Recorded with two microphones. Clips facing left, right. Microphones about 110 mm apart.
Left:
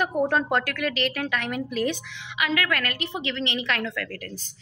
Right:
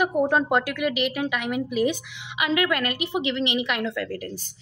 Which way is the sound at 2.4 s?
20° right (ahead or behind).